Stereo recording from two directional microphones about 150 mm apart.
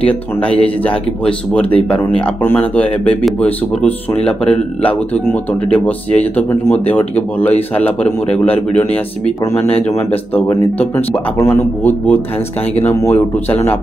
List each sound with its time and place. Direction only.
0.0 s speech: 10° left (ahead or behind)
9.6 s speech: 45° left (ahead or behind)
10.3 s speech: 15° left (ahead or behind)